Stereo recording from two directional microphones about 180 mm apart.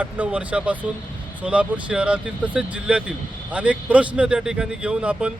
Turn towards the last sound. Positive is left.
turn(degrees=-5)  # may be behind; listen again after turning